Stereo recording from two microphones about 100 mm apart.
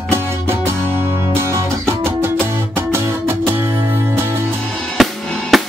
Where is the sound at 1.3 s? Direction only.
25° right (ahead or behind).